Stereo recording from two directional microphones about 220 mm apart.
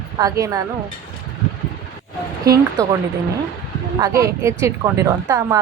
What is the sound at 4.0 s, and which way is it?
Speech, 15° right (ahead or behind).